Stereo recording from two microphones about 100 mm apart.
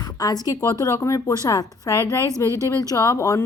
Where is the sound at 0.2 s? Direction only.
40° left (ahead or behind).